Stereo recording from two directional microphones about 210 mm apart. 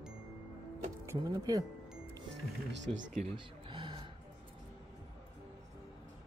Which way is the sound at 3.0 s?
30° right (ahead or behind).